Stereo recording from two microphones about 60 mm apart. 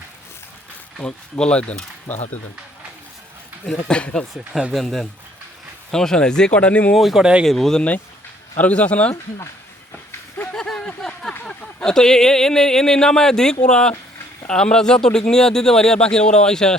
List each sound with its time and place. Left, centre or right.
0.9 s speech: centre
3.8 s speech: centre
4.7 s speech: centre; by 6.9 s left
6.9 s speech: centre
7.2 s speech: centre
7.4 s speech: centre
8.5 s speech: left
10.1 s a sound: left
10.5 s a sound: centre
11.4 s speech: centre